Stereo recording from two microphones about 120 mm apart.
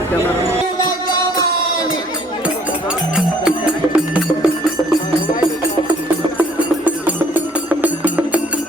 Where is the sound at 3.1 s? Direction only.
10° right (ahead or behind).